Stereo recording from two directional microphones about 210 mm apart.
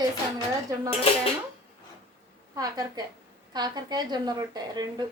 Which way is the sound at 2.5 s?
20° right (ahead or behind).